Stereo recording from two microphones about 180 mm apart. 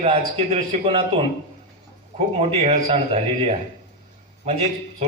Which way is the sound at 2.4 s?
35° right (ahead or behind).